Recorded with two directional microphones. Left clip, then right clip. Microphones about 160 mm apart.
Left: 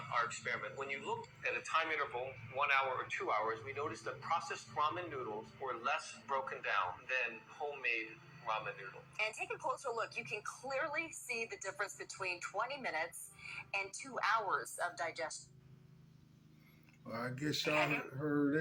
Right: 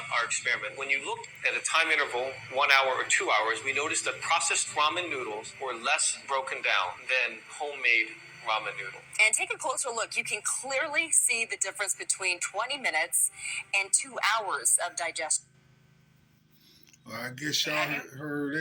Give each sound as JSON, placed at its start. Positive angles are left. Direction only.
{"t": 0.0, "sound": "a man's voice", "side_deg": -20}
{"t": 17.1, "sound": "speech", "side_deg": 10}
{"t": 18.2, "sound": "speech", "side_deg": 0}